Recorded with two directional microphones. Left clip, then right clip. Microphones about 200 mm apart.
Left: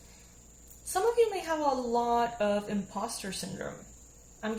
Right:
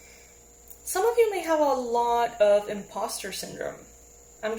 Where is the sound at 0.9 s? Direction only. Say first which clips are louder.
Right 4 dB; 25° right (ahead or behind).